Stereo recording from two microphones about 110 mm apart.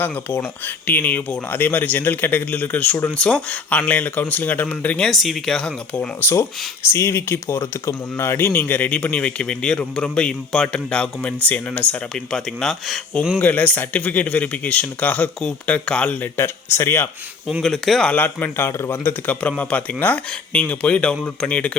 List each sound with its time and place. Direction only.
0.0 s speech: 20° left (ahead or behind); by 13.4 s centre (ahead or behind)
13.4 s speech: 15° left (ahead or behind)
16.7 s speech: 20° left (ahead or behind)
17.6 s speech: 5° left (ahead or behind)
18.1 s speech: 15° left (ahead or behind)